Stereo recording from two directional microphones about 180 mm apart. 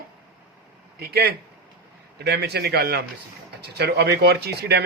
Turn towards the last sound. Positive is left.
turn(degrees=-65)  # may be behind; listen again after turning